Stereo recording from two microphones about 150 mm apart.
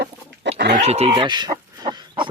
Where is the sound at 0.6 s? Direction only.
90° right.